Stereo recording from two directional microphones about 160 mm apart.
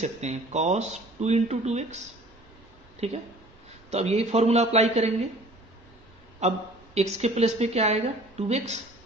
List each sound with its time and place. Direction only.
0.0 s a woman's voice: 45° right (ahead or behind)
6.4 s a woman's voice: 45° right (ahead or behind)